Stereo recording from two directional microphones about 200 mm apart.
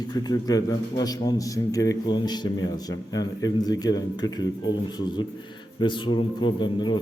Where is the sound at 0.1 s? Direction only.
20° left (ahead or behind).